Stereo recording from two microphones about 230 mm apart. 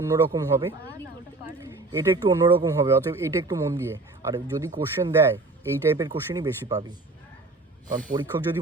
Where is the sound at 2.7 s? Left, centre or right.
Centre.